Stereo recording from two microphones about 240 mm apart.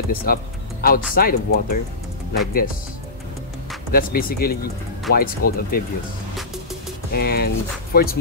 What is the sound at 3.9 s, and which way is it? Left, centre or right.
Speech, left.